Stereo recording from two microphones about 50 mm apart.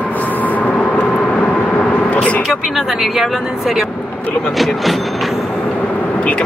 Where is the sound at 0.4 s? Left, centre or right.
Left.